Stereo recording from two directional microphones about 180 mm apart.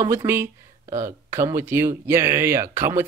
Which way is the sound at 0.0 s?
15° right (ahead or behind).